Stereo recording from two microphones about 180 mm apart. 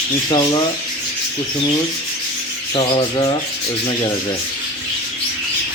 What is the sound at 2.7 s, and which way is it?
Speech, 25° left (ahead or behind).